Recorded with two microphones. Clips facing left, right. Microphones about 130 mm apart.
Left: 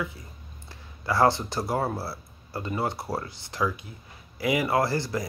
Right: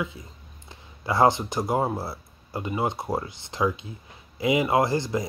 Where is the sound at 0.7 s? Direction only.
20° right (ahead or behind).